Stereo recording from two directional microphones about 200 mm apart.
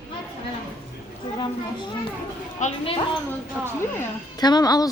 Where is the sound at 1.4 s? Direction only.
25° left (ahead or behind).